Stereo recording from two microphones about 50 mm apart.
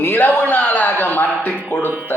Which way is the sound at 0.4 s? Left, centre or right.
Left.